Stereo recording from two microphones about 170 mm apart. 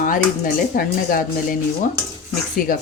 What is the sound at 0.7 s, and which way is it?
Speech, 55° left (ahead or behind).